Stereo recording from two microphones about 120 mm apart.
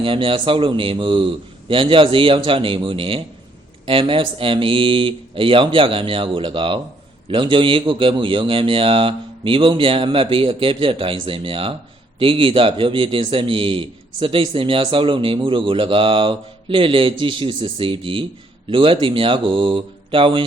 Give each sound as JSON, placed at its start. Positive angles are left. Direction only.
{"t": 0.0, "sound": "a man's voice", "side_deg": -50}